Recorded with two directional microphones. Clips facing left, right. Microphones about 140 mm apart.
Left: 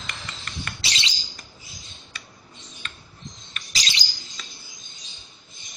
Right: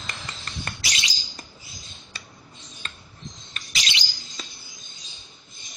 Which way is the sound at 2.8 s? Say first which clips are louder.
Even; 35° right (ahead or behind).